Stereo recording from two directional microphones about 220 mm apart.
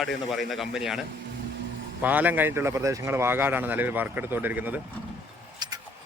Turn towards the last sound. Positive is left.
turn(degrees=-20)  # may be behind; listen again after turning